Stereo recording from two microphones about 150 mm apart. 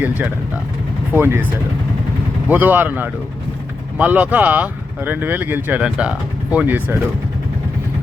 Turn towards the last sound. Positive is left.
turn(degrees=-10)  # may be behind; listen again after turning